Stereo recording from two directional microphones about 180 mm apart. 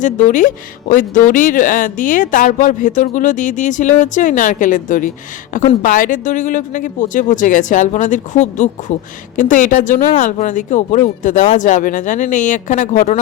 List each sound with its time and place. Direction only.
0.0 s speech: 45° left (ahead or behind)